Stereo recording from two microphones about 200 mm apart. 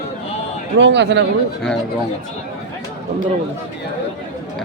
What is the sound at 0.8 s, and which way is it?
Speech, 60° right (ahead or behind).